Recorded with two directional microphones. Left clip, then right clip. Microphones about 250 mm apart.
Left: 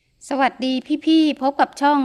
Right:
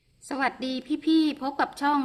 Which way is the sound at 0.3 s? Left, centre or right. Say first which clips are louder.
Left 8 dB; left.